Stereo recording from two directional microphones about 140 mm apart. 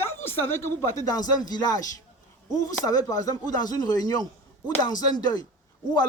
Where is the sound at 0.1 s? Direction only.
15° left (ahead or behind).